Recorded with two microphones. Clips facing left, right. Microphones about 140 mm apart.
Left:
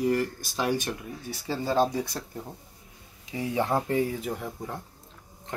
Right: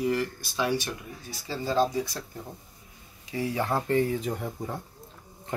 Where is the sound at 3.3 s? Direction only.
20° left (ahead or behind); by 4.8 s centre (ahead or behind).